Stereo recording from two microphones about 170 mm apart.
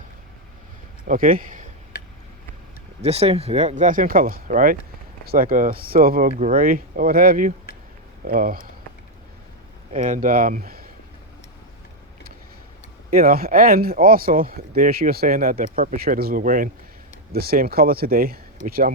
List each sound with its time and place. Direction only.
1.0 s speech: 55° right (ahead or behind)
3.0 s speech: 40° right (ahead or behind); by 8.7 s 55° right (ahead or behind)
9.9 s speech: 50° right (ahead or behind)
13.1 s speech: 60° right (ahead or behind)
17.3 s speech: 65° right (ahead or behind)